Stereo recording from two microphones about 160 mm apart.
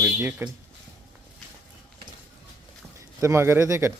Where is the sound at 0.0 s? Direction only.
15° right (ahead or behind).